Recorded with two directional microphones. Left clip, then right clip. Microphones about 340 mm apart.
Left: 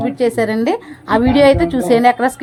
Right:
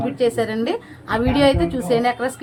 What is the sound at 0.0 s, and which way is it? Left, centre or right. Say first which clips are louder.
A woman's voice: left 4 dB; centre.